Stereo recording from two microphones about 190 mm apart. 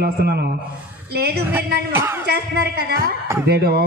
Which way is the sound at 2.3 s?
55° right (ahead or behind).